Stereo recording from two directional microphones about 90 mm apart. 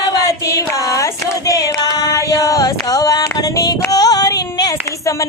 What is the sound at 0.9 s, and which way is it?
Singing, 40° left (ahead or behind).